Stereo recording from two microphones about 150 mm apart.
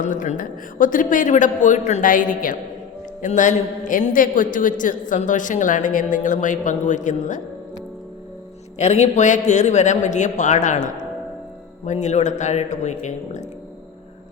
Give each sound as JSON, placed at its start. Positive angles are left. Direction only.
{"t": 0.0, "sound": "a man's voice", "side_deg": 60}
{"t": 8.8, "sound": "speech", "side_deg": 50}
{"t": 11.9, "sound": "speech", "side_deg": 50}